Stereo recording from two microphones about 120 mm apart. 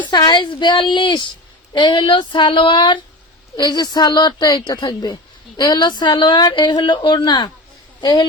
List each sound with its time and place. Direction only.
0.1 s speech: 35° left (ahead or behind)